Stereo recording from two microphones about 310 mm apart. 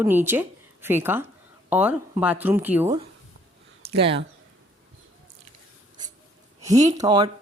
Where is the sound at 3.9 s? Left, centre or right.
Centre.